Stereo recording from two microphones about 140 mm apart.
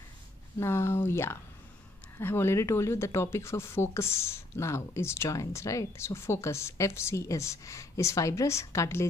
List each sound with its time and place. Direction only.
0.6 s speech: 20° left (ahead or behind)